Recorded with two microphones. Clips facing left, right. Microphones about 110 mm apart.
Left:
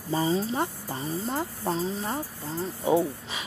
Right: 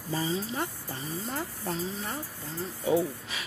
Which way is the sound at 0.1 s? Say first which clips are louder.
Left 5 dB; 40° left (ahead or behind).